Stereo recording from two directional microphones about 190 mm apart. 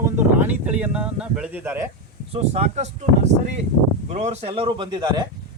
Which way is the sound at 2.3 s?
35° right (ahead or behind).